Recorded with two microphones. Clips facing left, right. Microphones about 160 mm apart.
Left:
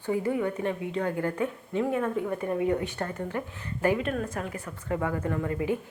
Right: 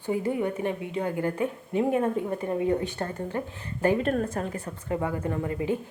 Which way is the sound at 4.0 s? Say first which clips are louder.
Right 4 dB; 40° right (ahead or behind).